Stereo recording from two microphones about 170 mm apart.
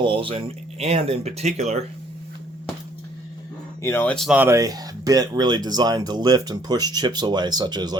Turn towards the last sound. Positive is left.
turn(degrees=-25)  # may be behind; listen again after turning